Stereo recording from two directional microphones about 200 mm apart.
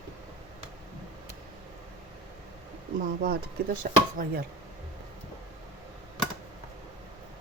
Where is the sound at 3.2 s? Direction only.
45° right (ahead or behind).